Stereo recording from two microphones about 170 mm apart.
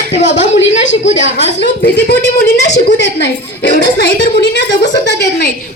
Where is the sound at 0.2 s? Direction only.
45° left (ahead or behind).